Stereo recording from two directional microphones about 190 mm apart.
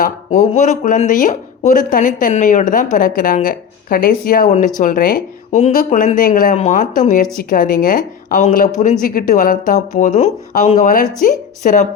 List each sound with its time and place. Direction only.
0.0 s speech: 40° left (ahead or behind)